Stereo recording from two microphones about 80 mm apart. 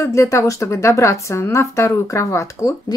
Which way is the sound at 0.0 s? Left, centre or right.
Left.